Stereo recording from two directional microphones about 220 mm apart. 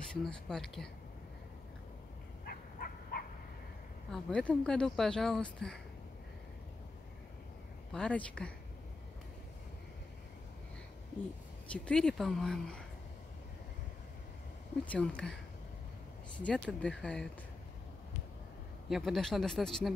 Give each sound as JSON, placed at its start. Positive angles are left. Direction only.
{"t": 0.1, "sound": "speech", "side_deg": 5}
{"t": 2.4, "sound": "a sound", "side_deg": 45}
{"t": 4.1, "sound": "speech", "side_deg": 5}
{"t": 7.9, "sound": "speech", "side_deg": 5}
{"t": 11.7, "sound": "speech", "side_deg": 5}
{"t": 14.9, "sound": "speech", "side_deg": 5}
{"t": 16.4, "sound": "speech", "side_deg": 5}
{"t": 18.9, "sound": "speech", "side_deg": 0}